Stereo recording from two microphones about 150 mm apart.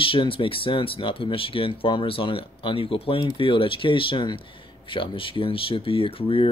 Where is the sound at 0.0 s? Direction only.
35° left (ahead or behind).